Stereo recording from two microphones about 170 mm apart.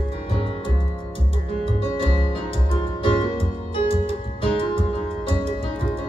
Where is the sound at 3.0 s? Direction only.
30° left (ahead or behind).